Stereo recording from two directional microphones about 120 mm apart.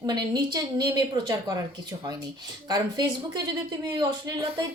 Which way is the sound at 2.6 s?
35° right (ahead or behind).